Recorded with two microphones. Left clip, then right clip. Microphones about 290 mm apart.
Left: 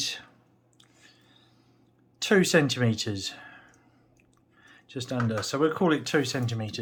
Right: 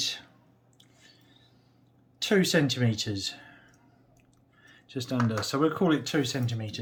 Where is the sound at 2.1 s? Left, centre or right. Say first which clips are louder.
Left 3 dB; centre.